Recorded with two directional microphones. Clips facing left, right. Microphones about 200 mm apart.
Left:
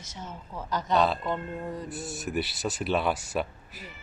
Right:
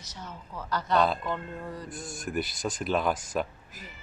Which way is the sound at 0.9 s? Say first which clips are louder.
Even; 5° left (ahead or behind).